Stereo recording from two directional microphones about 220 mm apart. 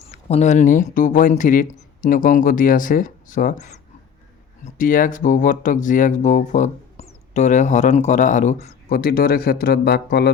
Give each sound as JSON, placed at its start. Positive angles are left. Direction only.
{"t": 0.1, "sound": "speech", "side_deg": 30}